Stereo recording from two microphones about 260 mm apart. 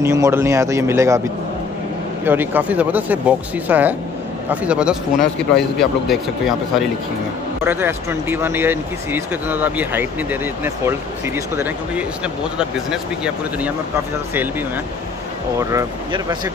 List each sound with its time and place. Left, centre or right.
0.0 s speech: centre
2.2 s speech: centre
15.7 s speech: centre